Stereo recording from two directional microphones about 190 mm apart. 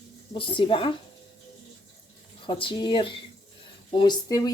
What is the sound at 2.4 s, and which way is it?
Speech, 25° left (ahead or behind).